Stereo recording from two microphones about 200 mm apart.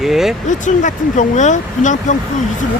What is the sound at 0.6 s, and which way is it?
Speech, 40° left (ahead or behind).